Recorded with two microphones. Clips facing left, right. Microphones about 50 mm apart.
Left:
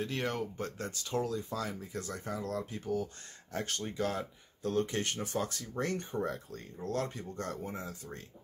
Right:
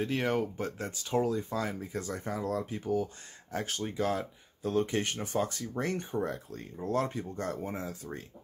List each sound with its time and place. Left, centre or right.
0.0 s speech: centre
1.0 s speech: right
3.5 s speech: centre
4.7 s speech: right
6.1 s speech: centre
6.8 s speech: centre